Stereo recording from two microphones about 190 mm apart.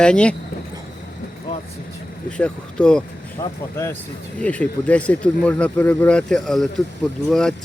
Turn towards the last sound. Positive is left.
turn(degrees=0)  # may be behind; listen again after turning